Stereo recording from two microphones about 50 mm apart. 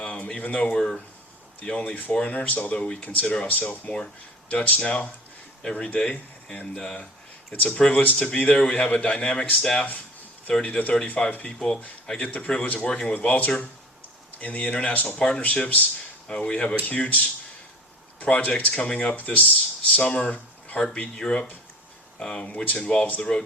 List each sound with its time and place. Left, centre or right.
0.0 s a sound: left
0.4 s speech: left
1.7 s speech: left
3.0 s speech: left
13.2 s speech: left
16.3 s speech: left